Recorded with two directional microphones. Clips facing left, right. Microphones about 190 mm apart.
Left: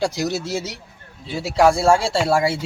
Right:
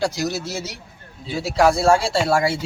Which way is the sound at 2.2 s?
10° left (ahead or behind).